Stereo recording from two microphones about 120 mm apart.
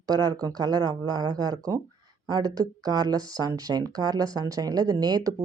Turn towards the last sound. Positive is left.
turn(degrees=-35)  # may be behind; listen again after turning